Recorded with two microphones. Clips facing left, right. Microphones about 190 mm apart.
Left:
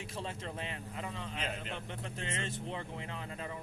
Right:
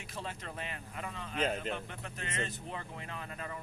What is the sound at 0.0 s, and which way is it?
Speech, 25° left (ahead or behind).